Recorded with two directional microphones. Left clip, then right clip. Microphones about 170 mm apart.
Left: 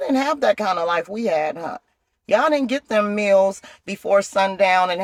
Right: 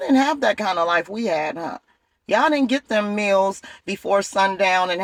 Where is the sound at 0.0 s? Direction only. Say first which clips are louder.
Right 1 dB; 15° left (ahead or behind).